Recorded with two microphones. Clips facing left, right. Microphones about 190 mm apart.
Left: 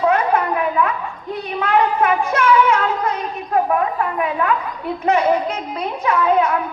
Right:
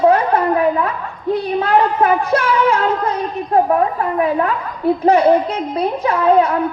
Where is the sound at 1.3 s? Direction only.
35° right (ahead or behind).